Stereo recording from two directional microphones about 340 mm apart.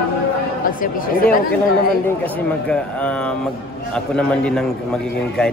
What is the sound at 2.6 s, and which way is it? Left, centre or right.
A man's voice, centre.